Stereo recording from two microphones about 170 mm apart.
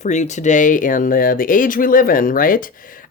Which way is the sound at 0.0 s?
45° left (ahead or behind).